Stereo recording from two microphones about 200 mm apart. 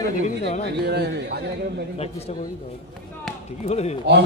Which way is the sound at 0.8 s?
55° right (ahead or behind).